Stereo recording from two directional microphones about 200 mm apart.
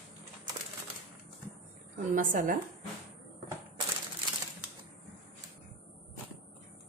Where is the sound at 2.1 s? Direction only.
45° right (ahead or behind).